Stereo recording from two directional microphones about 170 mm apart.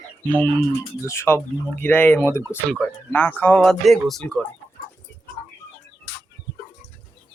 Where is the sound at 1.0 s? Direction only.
15° left (ahead or behind).